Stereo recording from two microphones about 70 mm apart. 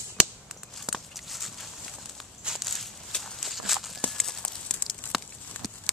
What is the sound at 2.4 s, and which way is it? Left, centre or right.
Walk, centre.